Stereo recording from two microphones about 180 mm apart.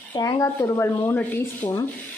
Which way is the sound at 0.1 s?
20° left (ahead or behind).